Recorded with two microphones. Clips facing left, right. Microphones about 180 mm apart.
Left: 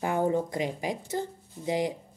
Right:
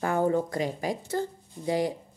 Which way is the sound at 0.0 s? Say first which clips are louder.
Right 1 dB; 15° left (ahead or behind).